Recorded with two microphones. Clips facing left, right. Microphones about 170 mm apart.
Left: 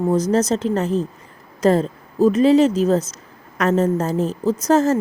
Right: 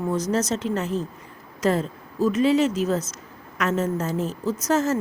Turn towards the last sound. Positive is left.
turn(degrees=35)  # may be behind; listen again after turning